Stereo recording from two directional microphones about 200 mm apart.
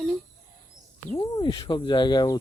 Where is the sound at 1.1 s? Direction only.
20° left (ahead or behind).